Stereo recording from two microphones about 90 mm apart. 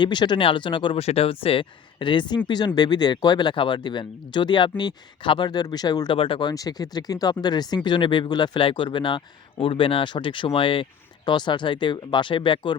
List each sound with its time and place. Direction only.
0.0 s speech: 55° left (ahead or behind)
6.1 s speech: 75° left (ahead or behind)
6.5 s speech: 45° left (ahead or behind)
7.9 s speech: 60° left (ahead or behind)
8.6 s speech: 65° left (ahead or behind)
11.3 s speech: 60° left (ahead or behind)